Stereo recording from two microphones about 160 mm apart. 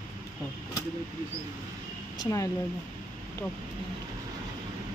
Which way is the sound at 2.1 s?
25° left (ahead or behind).